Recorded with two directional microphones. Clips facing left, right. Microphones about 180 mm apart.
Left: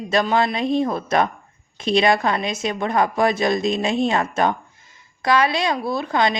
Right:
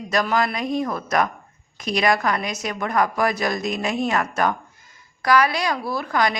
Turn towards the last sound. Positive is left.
turn(degrees=25)  # may be behind; listen again after turning